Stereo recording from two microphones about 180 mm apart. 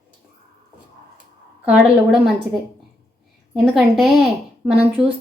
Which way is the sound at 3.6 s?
Centre (ahead or behind).